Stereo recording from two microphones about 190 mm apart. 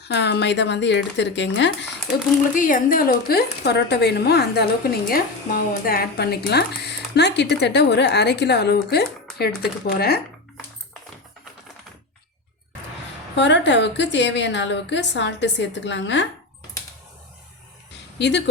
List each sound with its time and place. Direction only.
0.0 s a woman's voice: 65° left (ahead or behind)
2.6 s speech: 45° left (ahead or behind)
13.3 s a woman's voice: 65° left (ahead or behind)
18.2 s speech: 65° left (ahead or behind)